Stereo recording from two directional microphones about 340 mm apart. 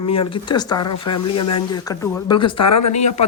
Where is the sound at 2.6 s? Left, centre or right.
Left.